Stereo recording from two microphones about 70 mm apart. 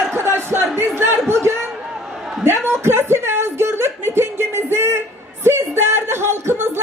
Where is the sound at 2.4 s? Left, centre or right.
Right.